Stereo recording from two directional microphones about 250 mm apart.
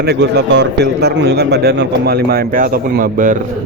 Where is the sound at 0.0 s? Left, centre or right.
Right.